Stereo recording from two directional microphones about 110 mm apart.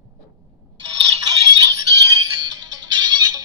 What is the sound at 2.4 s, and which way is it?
Music, 40° right (ahead or behind).